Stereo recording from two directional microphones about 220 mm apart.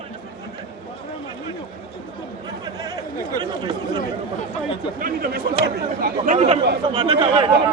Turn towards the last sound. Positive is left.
turn(degrees=-25)  # may be behind; listen again after turning